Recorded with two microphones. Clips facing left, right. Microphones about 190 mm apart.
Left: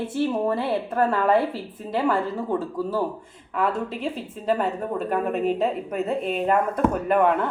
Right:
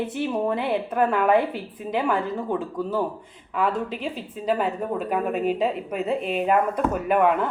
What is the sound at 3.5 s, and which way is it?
Speech, centre (ahead or behind).